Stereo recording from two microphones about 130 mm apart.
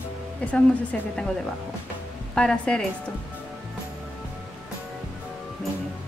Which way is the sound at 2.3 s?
5° left (ahead or behind).